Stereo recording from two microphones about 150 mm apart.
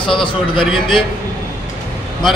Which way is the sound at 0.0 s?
35° left (ahead or behind).